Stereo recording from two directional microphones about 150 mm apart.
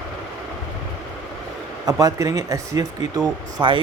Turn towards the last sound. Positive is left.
turn(degrees=-30)  # may be behind; listen again after turning